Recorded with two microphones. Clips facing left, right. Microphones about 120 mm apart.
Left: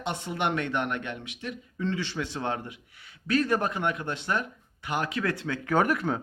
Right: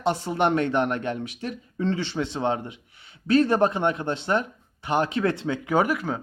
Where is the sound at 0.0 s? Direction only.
35° right (ahead or behind).